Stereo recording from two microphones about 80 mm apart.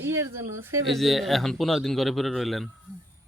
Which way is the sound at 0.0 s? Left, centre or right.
Right.